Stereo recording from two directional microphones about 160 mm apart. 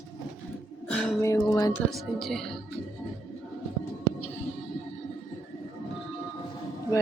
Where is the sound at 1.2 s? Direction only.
20° left (ahead or behind).